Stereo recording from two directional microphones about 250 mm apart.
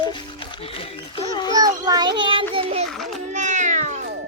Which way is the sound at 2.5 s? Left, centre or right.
Right.